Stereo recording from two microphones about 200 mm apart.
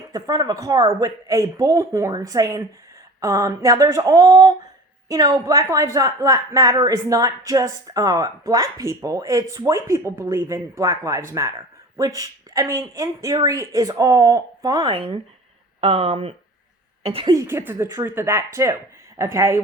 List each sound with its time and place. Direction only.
0.1 s speech: 20° right (ahead or behind)
17.3 s speech: 10° right (ahead or behind)